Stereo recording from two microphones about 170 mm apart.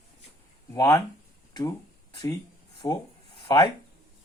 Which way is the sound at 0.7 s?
20° left (ahead or behind).